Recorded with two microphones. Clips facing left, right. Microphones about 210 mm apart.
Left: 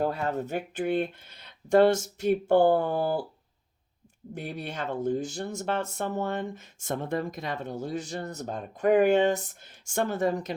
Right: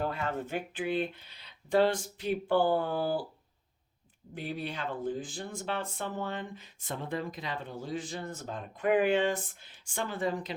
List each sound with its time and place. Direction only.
0.0 s speech: 40° left (ahead or behind)
4.4 s speech: 45° left (ahead or behind)